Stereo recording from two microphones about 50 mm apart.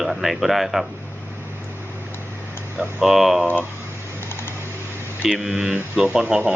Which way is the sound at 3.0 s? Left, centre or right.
Centre.